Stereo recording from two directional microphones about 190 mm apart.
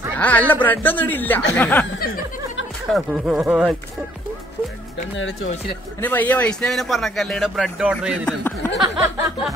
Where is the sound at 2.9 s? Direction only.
5° right (ahead or behind).